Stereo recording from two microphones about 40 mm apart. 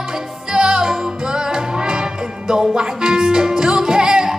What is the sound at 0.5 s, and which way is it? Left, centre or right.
Music, centre.